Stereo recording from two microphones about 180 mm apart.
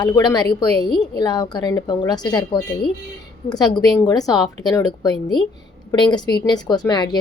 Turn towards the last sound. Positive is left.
turn(degrees=20)  # may be behind; listen again after turning